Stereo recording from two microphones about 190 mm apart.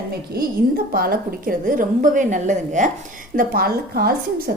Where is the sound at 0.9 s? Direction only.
50° right (ahead or behind).